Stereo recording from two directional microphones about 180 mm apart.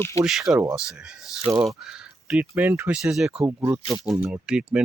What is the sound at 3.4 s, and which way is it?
Speech, 15° right (ahead or behind).